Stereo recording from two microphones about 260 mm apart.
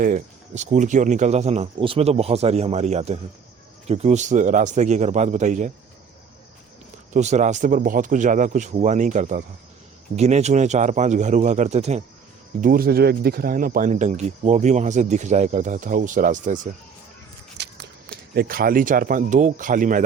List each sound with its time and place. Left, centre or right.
0.0 s speech: right
7.1 s speech: right
17.6 s a sound: right
18.3 s speech: right